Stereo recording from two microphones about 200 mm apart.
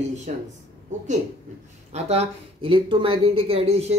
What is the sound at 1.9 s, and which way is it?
Speech, 35° right (ahead or behind).